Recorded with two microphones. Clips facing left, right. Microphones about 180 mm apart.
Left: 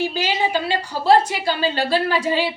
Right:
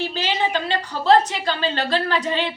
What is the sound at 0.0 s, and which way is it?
Speech, 10° left (ahead or behind).